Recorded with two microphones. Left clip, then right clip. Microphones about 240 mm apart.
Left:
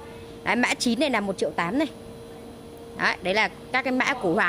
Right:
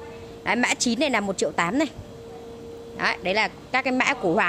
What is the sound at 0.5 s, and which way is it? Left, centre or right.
Speech, centre.